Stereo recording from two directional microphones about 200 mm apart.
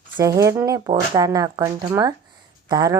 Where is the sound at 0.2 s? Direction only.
15° right (ahead or behind).